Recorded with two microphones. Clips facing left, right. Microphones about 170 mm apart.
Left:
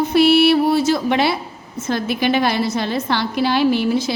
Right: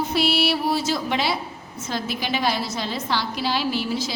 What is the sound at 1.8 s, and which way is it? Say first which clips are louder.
A woman's voice: left 8 dB; 55° left (ahead or behind).